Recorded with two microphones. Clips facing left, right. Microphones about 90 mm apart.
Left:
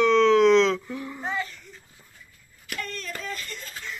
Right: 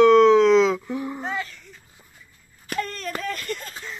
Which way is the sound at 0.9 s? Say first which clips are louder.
Right 6 dB; 20° right (ahead or behind).